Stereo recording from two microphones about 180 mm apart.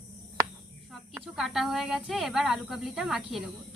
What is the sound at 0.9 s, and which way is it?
Speech, centre (ahead or behind).